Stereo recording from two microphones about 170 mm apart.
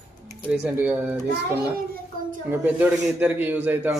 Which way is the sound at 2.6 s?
10° right (ahead or behind).